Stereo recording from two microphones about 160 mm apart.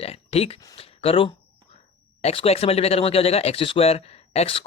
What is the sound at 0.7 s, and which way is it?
Speech, 35° left (ahead or behind).